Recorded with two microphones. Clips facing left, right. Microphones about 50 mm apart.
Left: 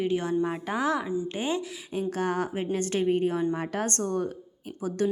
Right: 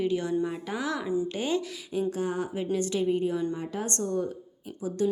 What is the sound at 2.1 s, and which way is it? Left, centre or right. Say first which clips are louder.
A woman's voice: left 2 dB; left.